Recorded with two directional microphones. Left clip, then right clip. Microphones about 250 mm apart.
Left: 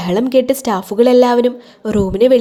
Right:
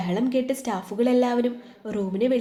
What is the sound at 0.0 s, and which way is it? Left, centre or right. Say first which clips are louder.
A woman's voice: left 12 dB; left.